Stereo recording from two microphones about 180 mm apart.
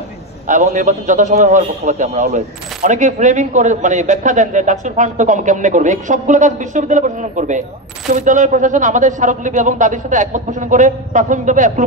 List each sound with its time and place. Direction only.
0.5 s a man's voice: 45° right (ahead or behind)